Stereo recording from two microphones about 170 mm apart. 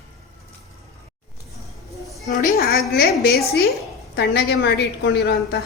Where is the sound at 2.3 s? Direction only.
55° left (ahead or behind).